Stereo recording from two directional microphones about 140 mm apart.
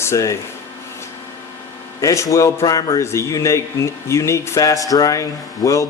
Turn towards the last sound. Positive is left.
turn(degrees=20)  # may be behind; listen again after turning